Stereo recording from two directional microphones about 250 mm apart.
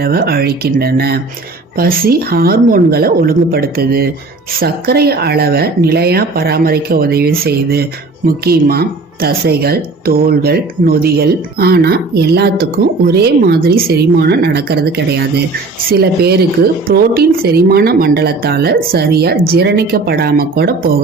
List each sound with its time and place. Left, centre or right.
0.0 s speech: right